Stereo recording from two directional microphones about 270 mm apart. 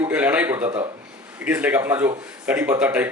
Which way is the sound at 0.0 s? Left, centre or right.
Centre.